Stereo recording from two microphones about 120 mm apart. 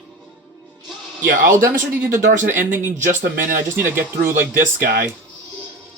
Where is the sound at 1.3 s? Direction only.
90° right.